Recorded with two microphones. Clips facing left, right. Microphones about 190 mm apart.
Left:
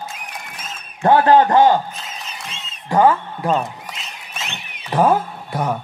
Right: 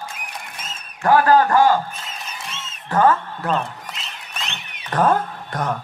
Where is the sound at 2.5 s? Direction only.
15° left (ahead or behind).